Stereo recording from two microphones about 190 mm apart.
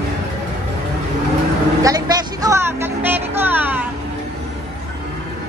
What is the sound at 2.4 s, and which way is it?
Music, 15° right (ahead or behind).